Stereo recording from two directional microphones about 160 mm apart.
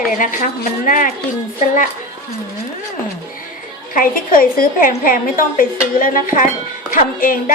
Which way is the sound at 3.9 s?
60° left (ahead or behind).